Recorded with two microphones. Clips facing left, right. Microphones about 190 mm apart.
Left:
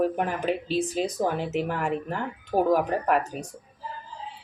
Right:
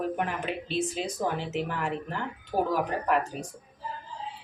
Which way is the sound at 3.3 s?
50° left (ahead or behind).